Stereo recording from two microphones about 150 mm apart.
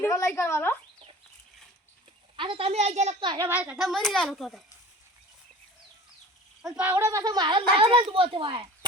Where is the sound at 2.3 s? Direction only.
35° right (ahead or behind).